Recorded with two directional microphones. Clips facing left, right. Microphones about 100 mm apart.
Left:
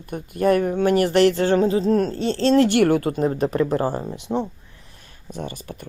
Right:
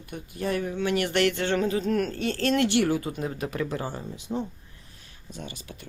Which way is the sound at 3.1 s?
40° left (ahead or behind).